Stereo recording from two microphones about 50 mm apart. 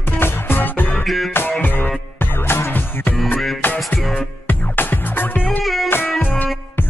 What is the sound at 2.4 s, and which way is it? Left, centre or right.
Music, left.